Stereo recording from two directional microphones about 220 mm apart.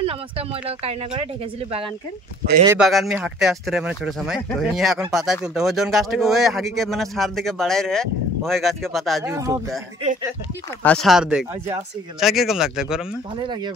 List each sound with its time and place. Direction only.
0.0 s speech: 25° right (ahead or behind)
2.7 s speech: centre (ahead or behind)
9.2 s speech: 15° right (ahead or behind)
10.8 s speech: 5° left (ahead or behind)